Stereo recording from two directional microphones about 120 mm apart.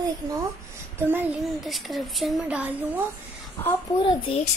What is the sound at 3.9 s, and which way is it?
Speech, 35° left (ahead or behind).